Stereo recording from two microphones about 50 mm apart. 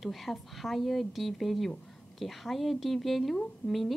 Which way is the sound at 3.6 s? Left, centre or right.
Left.